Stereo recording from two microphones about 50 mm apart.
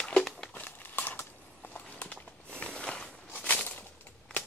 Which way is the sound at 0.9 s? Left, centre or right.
Left.